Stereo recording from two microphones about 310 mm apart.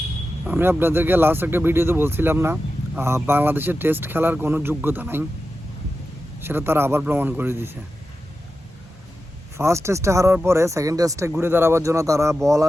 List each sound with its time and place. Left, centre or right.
0.4 s speech: centre
6.4 s speech: centre
9.6 s speech: centre